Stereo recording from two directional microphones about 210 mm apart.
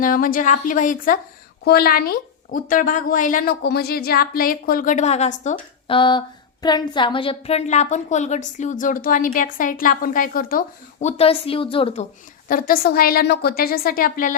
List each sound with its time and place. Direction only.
0.0 s a woman's voice: 40° left (ahead or behind)
11.2 s a woman's voice: 25° left (ahead or behind)
12.5 s a woman's voice: 45° left (ahead or behind)